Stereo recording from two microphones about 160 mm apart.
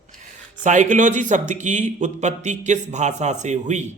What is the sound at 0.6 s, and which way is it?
Speech, 50° right (ahead or behind).